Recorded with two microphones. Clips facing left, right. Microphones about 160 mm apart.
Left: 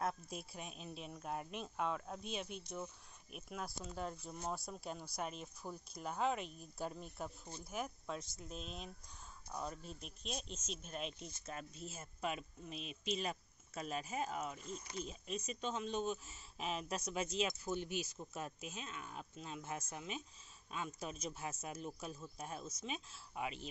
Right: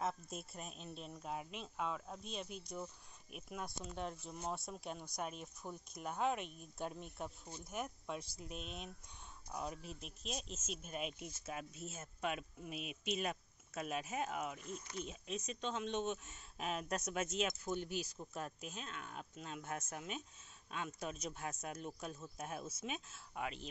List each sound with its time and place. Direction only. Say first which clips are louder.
0.0 s speech: even; centre (ahead or behind)
17.7 s speech: even; 40° right (ahead or behind)
18.1 s speech: even; 5° left (ahead or behind)